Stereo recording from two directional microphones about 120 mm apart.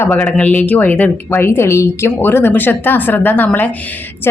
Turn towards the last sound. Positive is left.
turn(degrees=15)  # may be behind; listen again after turning